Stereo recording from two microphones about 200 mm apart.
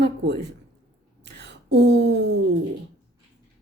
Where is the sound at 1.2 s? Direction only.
60° right (ahead or behind).